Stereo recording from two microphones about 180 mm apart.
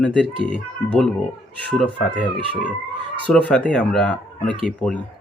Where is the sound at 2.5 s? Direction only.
5° left (ahead or behind).